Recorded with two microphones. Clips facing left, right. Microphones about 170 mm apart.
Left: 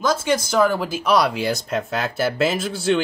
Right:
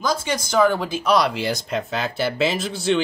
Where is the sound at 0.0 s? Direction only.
5° left (ahead or behind).